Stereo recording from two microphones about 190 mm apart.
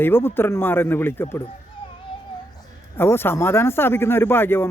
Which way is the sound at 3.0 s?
10° left (ahead or behind).